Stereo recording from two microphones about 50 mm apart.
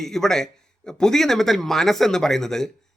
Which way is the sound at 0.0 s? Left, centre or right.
Centre.